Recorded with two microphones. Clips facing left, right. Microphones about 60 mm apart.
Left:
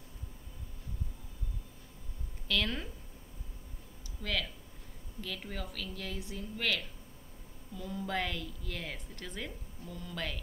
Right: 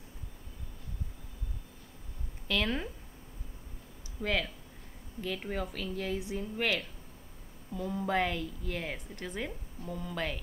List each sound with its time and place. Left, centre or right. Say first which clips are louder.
2.4 s speech: right 2 dB; centre
4.2 s a woman's voice: right 4 dB; right